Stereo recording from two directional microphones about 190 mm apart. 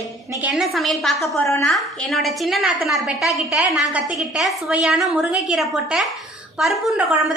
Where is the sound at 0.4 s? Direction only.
Centre (ahead or behind).